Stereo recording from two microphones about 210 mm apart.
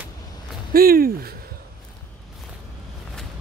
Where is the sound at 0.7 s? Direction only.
45° right (ahead or behind).